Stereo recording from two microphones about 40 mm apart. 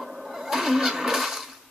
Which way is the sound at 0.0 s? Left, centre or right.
Centre.